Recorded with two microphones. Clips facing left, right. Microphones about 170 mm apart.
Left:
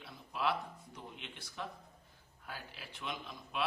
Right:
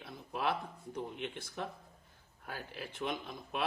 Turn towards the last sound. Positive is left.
turn(degrees=-50)  # may be behind; listen again after turning